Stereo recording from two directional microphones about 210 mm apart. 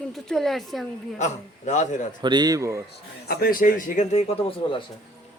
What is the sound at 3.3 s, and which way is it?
A man's voice, 45° left (ahead or behind).